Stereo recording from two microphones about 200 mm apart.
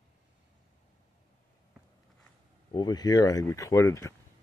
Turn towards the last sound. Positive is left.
turn(degrees=15)  # may be behind; listen again after turning